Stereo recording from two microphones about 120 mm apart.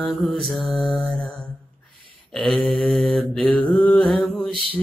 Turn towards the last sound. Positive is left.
turn(degrees=0)  # may be behind; listen again after turning